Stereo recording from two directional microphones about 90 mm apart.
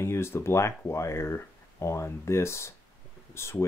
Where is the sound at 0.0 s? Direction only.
30° left (ahead or behind).